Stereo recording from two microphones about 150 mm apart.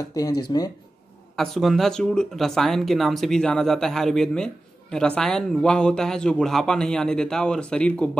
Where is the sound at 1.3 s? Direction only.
Centre (ahead or behind).